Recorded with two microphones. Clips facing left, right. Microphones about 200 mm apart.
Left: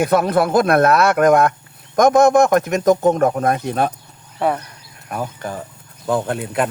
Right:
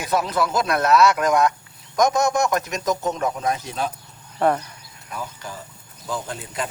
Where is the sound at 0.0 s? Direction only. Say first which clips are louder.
Left 7 dB; 55° left (ahead or behind).